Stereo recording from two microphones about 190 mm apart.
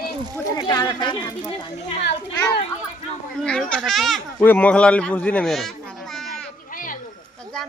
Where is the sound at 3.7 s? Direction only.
Centre (ahead or behind).